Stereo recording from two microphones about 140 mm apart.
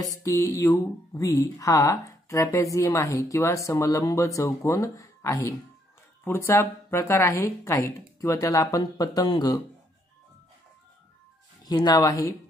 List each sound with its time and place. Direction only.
0.2 s speech: 20° left (ahead or behind)
11.6 s speech: 30° left (ahead or behind)